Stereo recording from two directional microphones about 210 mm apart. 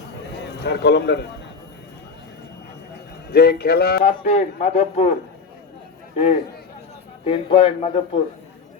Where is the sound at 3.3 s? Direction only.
50° left (ahead or behind).